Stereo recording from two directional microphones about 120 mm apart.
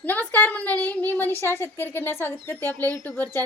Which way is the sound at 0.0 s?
15° left (ahead or behind).